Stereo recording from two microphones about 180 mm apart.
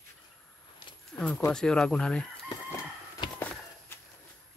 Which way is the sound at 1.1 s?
5° left (ahead or behind).